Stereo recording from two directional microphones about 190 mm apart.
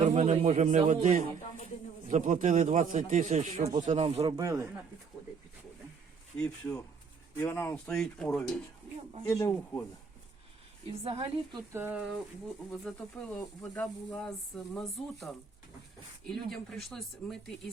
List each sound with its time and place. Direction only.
0.0 s speech: 35° right (ahead or behind)
4.4 s speech: 15° right (ahead or behind)
6.3 s speech: 10° left (ahead or behind)
9.3 s speech: 15° left (ahead or behind)
11.0 s a woman's voice: 30° right (ahead or behind)
11.7 s speech: 10° right (ahead or behind)